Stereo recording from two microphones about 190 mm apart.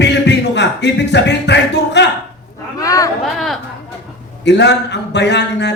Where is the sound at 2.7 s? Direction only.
15° left (ahead or behind).